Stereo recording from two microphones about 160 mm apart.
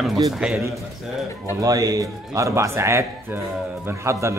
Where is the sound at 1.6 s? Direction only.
20° right (ahead or behind).